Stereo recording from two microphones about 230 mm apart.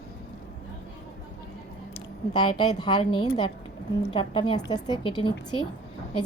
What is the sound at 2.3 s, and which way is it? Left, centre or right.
A woman's voice, centre.